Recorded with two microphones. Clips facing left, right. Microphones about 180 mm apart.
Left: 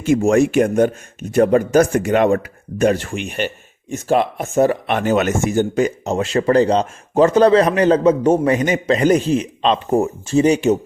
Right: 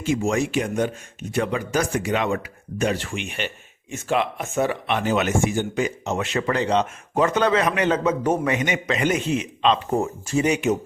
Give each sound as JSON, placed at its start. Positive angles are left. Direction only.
{"t": 0.0, "sound": "speech", "side_deg": 50}